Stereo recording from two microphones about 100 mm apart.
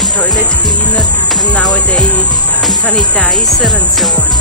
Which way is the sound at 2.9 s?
5° left (ahead or behind).